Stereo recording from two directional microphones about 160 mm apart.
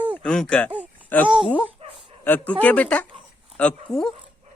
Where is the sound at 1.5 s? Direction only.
10° left (ahead or behind).